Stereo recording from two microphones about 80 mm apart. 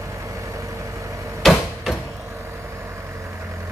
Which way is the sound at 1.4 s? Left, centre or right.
Centre.